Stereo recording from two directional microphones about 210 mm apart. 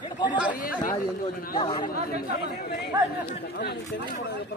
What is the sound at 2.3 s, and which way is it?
Speech, 50° left (ahead or behind).